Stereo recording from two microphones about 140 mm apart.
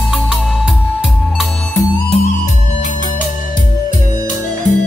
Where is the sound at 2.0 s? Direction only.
60° left (ahead or behind).